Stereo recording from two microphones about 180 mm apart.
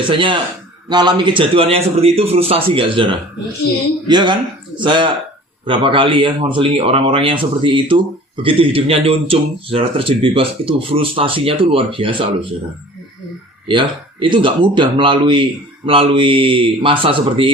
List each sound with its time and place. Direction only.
0.1 s a man's voice: 30° right (ahead or behind)
13.7 s speech: 25° right (ahead or behind)